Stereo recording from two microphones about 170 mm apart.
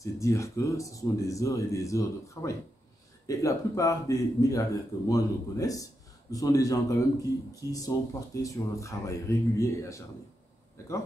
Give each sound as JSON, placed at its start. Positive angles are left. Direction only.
{"t": 0.0, "sound": "speech", "side_deg": 15}